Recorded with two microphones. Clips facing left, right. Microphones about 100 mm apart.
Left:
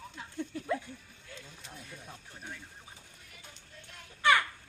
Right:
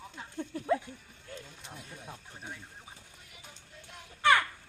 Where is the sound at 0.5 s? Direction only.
40° right (ahead or behind).